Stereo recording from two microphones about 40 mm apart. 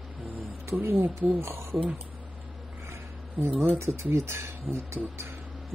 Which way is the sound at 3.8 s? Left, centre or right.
Right.